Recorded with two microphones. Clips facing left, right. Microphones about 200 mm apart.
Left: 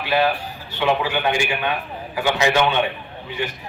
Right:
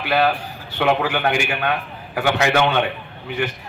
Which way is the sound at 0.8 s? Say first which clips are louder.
Right 2 dB; 55° right (ahead or behind).